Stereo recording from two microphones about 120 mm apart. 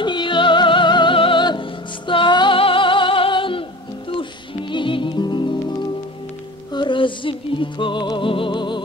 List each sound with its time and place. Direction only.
0.0 s music: 40° left (ahead or behind)